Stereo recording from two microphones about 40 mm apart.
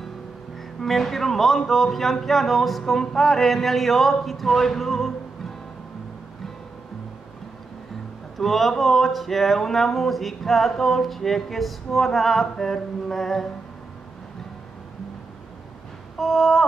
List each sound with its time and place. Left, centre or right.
0.8 s speech: centre
8.4 s speech: centre
16.2 s speech: centre